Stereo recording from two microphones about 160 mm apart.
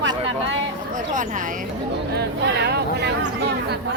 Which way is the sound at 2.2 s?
90° right.